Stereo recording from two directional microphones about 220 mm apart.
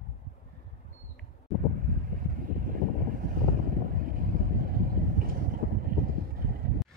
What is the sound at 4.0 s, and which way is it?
Vehicle, 40° right (ahead or behind).